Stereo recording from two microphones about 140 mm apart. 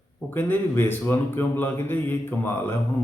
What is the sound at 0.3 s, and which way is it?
Speech, 15° left (ahead or behind).